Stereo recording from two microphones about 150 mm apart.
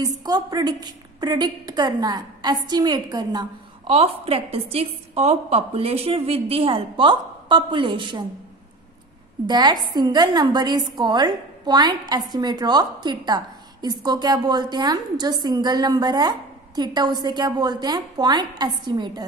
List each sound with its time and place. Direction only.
0.2 s a woman's voice: 25° right (ahead or behind)
3.8 s a woman's voice: 40° right (ahead or behind)
9.5 s a woman's voice: 30° right (ahead or behind)